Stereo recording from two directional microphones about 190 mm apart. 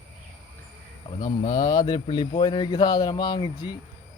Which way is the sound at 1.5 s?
20° left (ahead or behind).